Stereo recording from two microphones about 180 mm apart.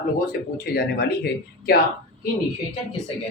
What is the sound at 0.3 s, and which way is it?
Speech, 55° left (ahead or behind).